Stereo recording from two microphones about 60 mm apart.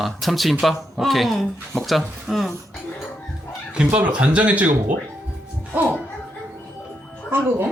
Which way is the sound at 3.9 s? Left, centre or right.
Right.